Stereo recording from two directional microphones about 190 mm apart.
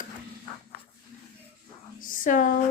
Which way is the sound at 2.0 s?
45° left (ahead or behind).